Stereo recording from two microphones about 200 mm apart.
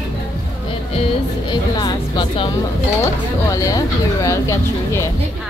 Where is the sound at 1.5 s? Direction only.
20° left (ahead or behind).